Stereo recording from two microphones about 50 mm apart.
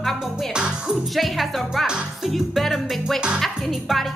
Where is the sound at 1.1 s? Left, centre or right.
Centre.